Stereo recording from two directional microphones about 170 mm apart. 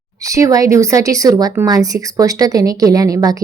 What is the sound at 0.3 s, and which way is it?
A woman's voice, 20° right (ahead or behind).